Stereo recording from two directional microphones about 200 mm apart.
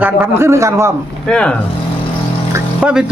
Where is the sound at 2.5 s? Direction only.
5° right (ahead or behind).